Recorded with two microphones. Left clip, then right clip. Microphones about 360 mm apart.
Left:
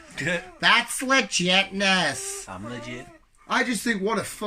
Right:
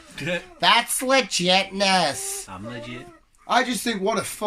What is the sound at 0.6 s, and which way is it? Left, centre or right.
Speech, centre.